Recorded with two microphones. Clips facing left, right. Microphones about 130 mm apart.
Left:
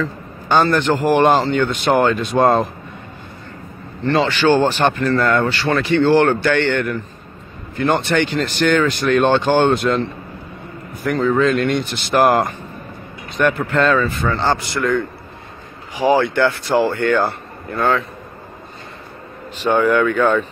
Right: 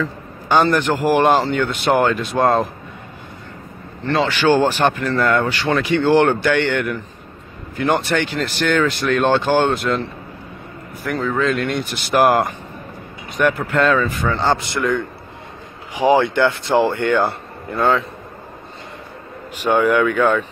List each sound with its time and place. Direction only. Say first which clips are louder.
0.5 s speech: left 1 dB; 10° right (ahead or behind)
4.1 s speech: left 1 dB; 5° right (ahead or behind)
11.1 s speech: left 4 dB; centre (ahead or behind); by 14.9 s 20° right (ahead or behind)
16.0 s speech: even; 20° right (ahead or behind)
19.5 s speech: even; 10° right (ahead or behind)